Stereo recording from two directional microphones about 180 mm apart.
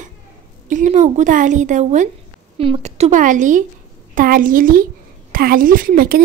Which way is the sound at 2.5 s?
30° right (ahead or behind).